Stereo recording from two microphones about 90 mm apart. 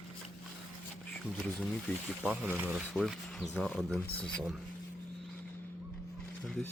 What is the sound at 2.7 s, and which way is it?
Speech, centre (ahead or behind).